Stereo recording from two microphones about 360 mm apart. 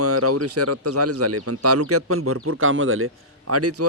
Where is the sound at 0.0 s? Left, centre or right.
Right.